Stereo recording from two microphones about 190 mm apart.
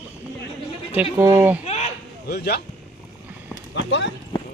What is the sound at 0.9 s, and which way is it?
Speech, 10° right (ahead or behind).